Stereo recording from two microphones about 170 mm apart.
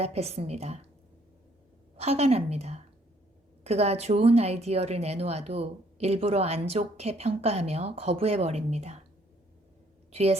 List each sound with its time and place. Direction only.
0.0 s speech: 40° right (ahead or behind)
2.0 s speech: 40° right (ahead or behind)
10.1 s a woman's voice: 40° right (ahead or behind)